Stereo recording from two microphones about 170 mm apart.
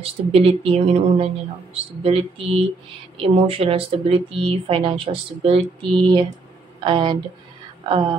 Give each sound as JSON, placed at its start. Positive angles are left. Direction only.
{"t": 0.0, "sound": "a woman's voice", "side_deg": -35}